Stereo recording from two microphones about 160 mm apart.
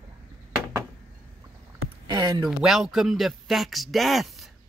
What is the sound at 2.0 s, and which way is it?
Speech, 30° right (ahead or behind).